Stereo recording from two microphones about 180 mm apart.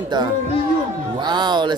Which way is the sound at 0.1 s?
25° right (ahead or behind).